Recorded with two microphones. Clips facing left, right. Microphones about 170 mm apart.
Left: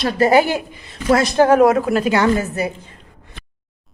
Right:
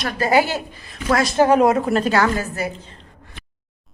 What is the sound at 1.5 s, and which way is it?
Speech, centre (ahead or behind).